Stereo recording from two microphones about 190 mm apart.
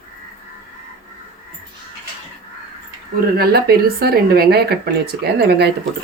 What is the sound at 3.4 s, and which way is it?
Speech, 55° right (ahead or behind).